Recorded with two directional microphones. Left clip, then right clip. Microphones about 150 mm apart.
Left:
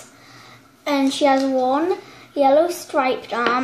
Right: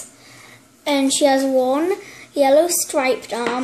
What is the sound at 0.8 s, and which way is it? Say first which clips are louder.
Speech: right 1 dB; 10° right (ahead or behind).